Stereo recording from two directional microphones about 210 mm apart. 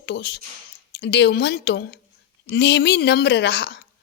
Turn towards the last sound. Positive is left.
turn(degrees=55)  # may be behind; listen again after turning